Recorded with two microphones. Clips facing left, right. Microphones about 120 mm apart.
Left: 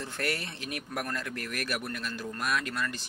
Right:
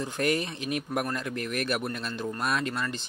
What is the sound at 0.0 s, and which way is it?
Speech, 15° right (ahead or behind).